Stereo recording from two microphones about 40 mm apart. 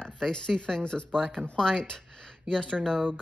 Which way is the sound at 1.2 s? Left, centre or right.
Centre.